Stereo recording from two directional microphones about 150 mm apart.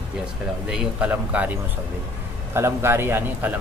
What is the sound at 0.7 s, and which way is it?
A man's voice, 5° right (ahead or behind).